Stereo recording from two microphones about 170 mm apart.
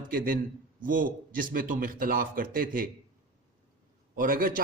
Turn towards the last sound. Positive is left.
turn(degrees=-55)  # may be behind; listen again after turning